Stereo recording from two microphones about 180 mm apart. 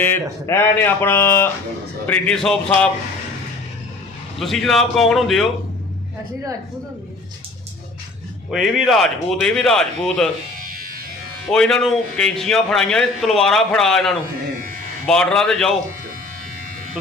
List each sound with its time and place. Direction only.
0.0 s a man's voice: 15° left (ahead or behind)
4.4 s a man's voice: centre (ahead or behind)
8.4 s a man's voice: centre (ahead or behind)
10.6 s music: 50° right (ahead or behind)
11.4 s a man's voice: 5° left (ahead or behind)